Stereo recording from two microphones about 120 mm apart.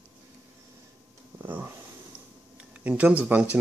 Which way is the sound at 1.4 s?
15° right (ahead or behind).